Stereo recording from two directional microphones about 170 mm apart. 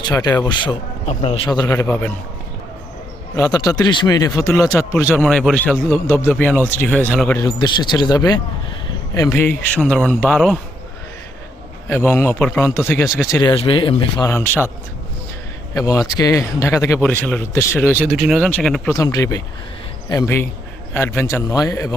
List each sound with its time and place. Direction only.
0.0 s speech: 25° left (ahead or behind)
3.3 s speech: 20° left (ahead or behind); by 7.3 s 5° left (ahead or behind)
7.3 s speech: 25° left (ahead or behind); by 10.6 s centre (ahead or behind)
11.9 s speech: 15° left (ahead or behind)
13.5 s speech: 30° left (ahead or behind)
14.3 s speech: 15° left (ahead or behind)
15.7 s speech: 20° left (ahead or behind)
18.1 s speech: centre (ahead or behind)
18.9 s speech: 20° left (ahead or behind)